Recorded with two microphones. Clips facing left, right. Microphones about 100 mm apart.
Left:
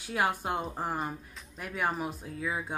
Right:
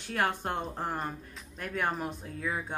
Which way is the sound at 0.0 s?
10° left (ahead or behind).